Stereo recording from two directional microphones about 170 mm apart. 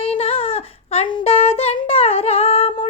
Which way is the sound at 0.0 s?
35° left (ahead or behind).